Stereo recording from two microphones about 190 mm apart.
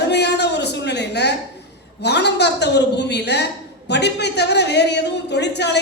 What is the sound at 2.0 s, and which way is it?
A man's voice, 60° left (ahead or behind).